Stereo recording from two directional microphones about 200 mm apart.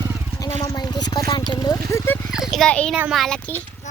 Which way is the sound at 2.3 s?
Centre (ahead or behind).